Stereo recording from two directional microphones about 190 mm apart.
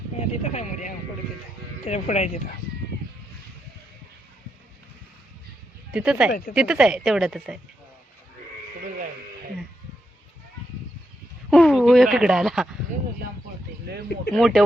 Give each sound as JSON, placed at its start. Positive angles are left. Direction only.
{"t": 0.2, "sound": "speech", "side_deg": 40}
{"t": 5.9, "sound": "speech", "side_deg": -5}
{"t": 11.5, "sound": "speech", "side_deg": 0}
{"t": 14.3, "sound": "speech", "side_deg": 0}